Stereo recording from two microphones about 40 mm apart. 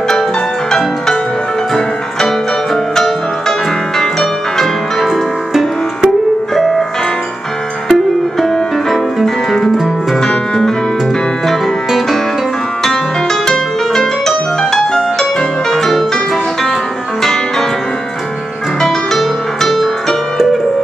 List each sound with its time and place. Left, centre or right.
0.1 s music: centre
5.0 s music: centre
7.9 s music: centre
10.2 s music: centre
12.8 s music: centre
17.2 s music: centre
19.1 s music: centre